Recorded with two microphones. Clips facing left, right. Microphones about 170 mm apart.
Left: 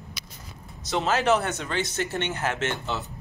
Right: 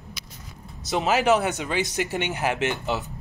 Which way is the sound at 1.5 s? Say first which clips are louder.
Right 3 dB; 15° right (ahead or behind).